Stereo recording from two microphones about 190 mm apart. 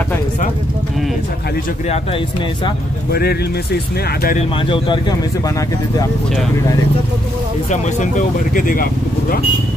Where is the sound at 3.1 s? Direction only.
55° left (ahead or behind).